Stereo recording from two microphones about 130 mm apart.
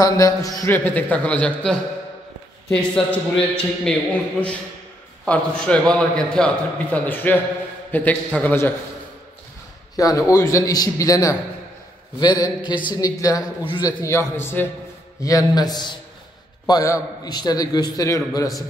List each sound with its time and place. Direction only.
0.0 s a man's voice: 25° left (ahead or behind)
0.7 s a man's voice: 15° left (ahead or behind)
5.2 s a man's voice: 10° left (ahead or behind)
9.9 s a man's voice: 25° left (ahead or behind)
15.2 s a man's voice: 30° left (ahead or behind)